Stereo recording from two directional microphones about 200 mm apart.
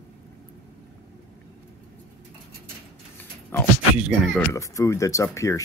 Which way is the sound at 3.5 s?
10° left (ahead or behind).